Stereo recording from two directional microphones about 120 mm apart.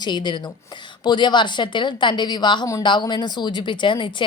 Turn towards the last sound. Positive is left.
turn(degrees=40)  # may be behind; listen again after turning